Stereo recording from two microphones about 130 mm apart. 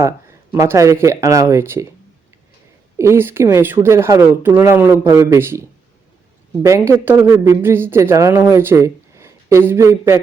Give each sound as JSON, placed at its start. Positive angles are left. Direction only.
{"t": 0.0, "sound": "speech", "side_deg": -20}
{"t": 3.0, "sound": "speech", "side_deg": -20}